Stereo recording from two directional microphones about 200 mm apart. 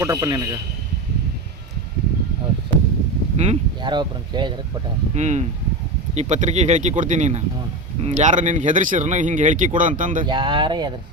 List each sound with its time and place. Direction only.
0.0 s a man's voice: 15° right (ahead or behind)
3.3 s speech: 30° right (ahead or behind)
5.1 s speech: 35° right (ahead or behind)
10.2 s speech: 25° right (ahead or behind)